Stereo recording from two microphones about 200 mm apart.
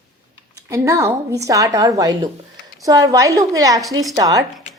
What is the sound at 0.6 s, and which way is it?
A woman's voice, 15° right (ahead or behind).